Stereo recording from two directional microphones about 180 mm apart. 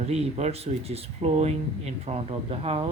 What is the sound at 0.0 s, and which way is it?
Speech, 35° right (ahead or behind).